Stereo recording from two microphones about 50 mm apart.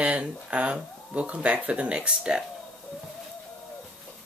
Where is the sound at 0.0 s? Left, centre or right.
Right.